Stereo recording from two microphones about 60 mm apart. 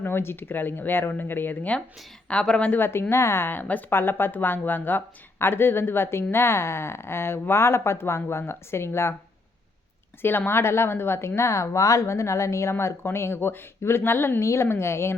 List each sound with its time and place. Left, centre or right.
0.0 s a woman's voice: left
2.2 s speech: centre
2.7 s a woman's voice: left
10.2 s a woman's voice: left
12.7 s a woman's voice: left
14.4 s a woman's voice: left